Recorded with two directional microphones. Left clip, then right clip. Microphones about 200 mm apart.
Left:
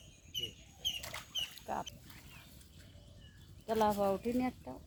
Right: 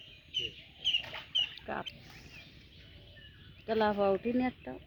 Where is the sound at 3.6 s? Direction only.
40° right (ahead or behind).